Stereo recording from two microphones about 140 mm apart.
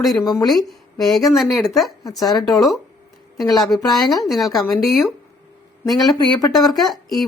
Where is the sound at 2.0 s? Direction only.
25° left (ahead or behind).